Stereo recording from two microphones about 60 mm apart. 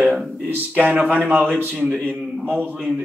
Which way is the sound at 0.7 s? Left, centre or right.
Centre.